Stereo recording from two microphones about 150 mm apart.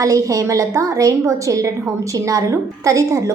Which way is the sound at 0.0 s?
20° right (ahead or behind).